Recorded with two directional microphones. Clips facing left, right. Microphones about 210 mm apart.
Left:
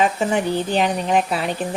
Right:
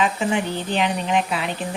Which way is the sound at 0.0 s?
45° left (ahead or behind).